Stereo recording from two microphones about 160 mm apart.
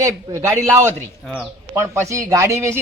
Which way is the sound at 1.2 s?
Centre (ahead or behind).